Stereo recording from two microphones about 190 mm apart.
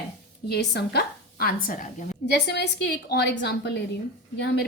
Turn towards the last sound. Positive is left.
turn(degrees=60)  # may be behind; listen again after turning